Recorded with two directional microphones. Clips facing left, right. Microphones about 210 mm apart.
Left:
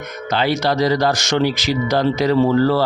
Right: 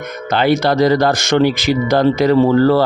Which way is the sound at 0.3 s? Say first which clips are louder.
Right 4 dB; 55° right (ahead or behind).